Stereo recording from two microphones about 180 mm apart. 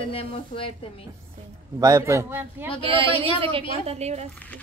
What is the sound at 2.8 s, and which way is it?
A woman's voice, 30° right (ahead or behind).